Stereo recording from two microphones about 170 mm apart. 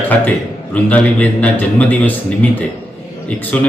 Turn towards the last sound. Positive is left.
turn(degrees=10)  # may be behind; listen again after turning